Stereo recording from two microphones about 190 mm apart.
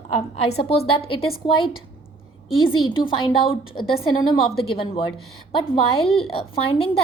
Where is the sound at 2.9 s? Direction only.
25° left (ahead or behind).